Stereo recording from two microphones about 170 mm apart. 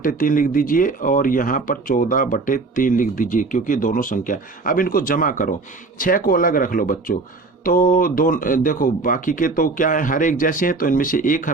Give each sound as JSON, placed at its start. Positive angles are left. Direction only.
{"t": 0.0, "sound": "speech", "side_deg": 55}